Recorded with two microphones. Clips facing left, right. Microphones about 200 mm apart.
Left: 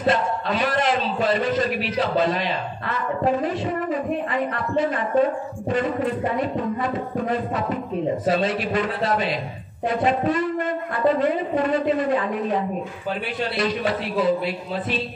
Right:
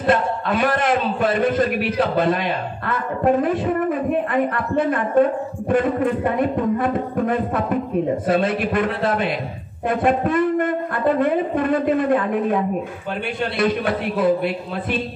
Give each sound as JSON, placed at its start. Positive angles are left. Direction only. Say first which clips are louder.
{"t": 0.0, "sound": "a man's voice", "louder": "right 2 dB", "side_deg": -55}